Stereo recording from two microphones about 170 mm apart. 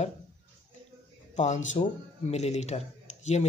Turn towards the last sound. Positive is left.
turn(degrees=40)  # may be behind; listen again after turning